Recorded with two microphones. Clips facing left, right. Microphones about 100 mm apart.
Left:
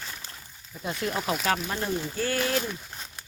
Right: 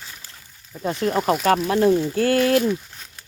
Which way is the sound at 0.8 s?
40° right (ahead or behind).